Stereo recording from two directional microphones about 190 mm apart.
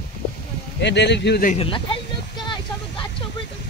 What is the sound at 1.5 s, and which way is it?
Speech, 30° left (ahead or behind).